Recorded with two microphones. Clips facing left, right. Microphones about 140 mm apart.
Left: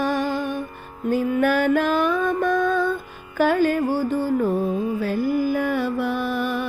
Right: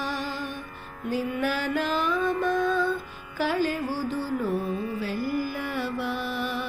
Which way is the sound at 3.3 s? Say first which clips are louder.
Left 7 dB; 50° left (ahead or behind).